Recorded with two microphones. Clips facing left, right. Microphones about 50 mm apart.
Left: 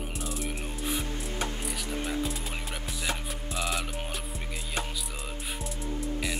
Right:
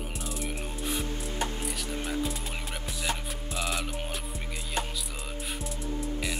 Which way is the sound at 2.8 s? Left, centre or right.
Centre.